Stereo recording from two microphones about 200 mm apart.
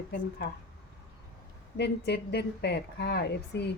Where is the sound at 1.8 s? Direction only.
55° left (ahead or behind).